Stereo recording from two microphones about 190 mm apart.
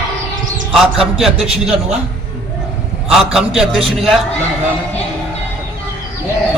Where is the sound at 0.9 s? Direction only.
Centre (ahead or behind).